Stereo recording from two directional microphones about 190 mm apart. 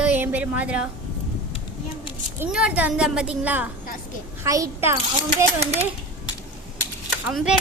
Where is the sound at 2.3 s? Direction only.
5° right (ahead or behind).